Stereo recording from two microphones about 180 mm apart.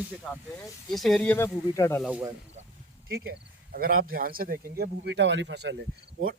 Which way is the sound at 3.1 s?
60° right (ahead or behind).